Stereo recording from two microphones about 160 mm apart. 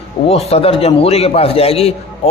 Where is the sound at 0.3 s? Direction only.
40° left (ahead or behind).